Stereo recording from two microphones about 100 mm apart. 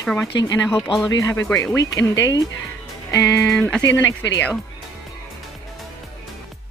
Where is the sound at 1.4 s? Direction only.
10° left (ahead or behind).